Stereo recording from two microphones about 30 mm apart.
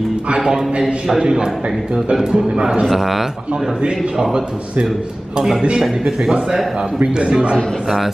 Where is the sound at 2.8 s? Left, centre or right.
Centre.